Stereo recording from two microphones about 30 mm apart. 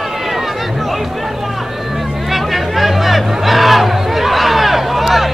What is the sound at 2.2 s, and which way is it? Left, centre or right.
Chatter, centre.